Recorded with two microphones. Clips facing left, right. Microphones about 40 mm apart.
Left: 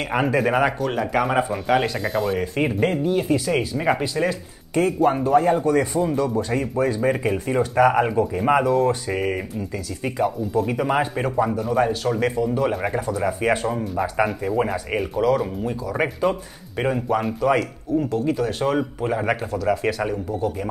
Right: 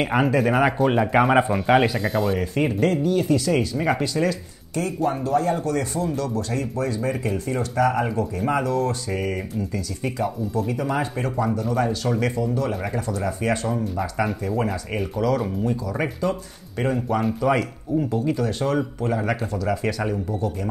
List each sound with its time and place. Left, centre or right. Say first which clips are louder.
0.2 s speech: left 1 dB; centre
0.7 s speech: right 3 dB; centre
4.7 s speech: left 5 dB; left; by 10.7 s centre
10.7 s speech: left 3 dB; left; by 12.4 s centre
12.5 s speech: left 3 dB; left
16.0 s speech: left 5 dB; left
16.8 s speech: left 1 dB; centre
19.5 s speech: left 3 dB; centre